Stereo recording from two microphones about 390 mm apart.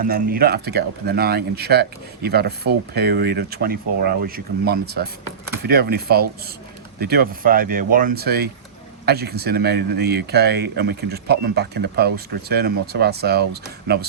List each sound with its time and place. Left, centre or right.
0.0 s speech: right